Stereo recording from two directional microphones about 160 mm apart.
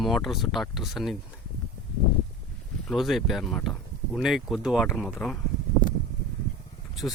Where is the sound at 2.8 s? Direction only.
Centre (ahead or behind).